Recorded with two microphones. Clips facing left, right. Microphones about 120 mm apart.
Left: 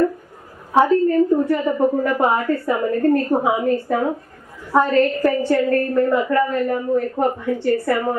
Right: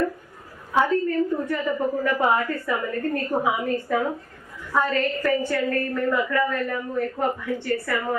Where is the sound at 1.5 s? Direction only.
40° left (ahead or behind).